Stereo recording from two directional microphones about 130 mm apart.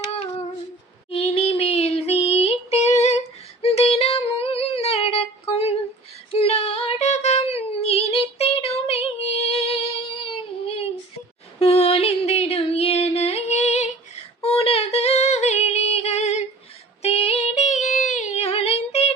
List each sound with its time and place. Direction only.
1.1 s child singing: 50° left (ahead or behind)
3.6 s a sound: 50° left (ahead or behind)
6.3 s female singing: 50° left (ahead or behind)
11.6 s music: 50° left (ahead or behind)
14.4 s female singing: 50° left (ahead or behind)